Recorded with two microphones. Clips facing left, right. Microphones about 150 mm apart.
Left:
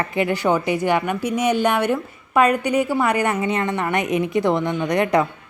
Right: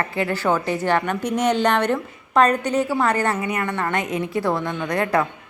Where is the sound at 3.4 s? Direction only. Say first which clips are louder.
Left 3 dB; 25° left (ahead or behind).